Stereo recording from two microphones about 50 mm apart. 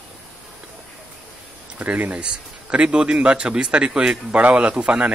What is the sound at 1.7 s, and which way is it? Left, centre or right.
Speech, right.